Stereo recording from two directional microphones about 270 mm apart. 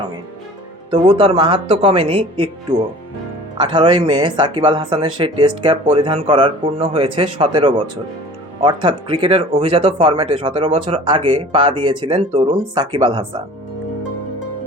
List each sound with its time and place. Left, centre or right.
0.9 s speech: centre
3.6 s speech: centre